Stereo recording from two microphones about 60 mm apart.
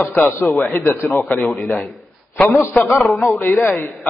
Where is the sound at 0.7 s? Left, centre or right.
Left.